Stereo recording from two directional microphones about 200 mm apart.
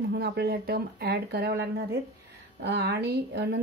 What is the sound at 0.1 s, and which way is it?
A woman's voice, 55° right (ahead or behind).